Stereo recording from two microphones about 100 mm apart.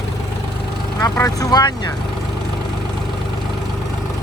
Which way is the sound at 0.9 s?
25° left (ahead or behind).